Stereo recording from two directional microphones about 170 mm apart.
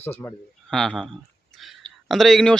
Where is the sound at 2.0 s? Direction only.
Centre (ahead or behind).